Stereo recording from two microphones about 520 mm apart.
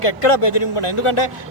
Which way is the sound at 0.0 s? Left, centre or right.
Left.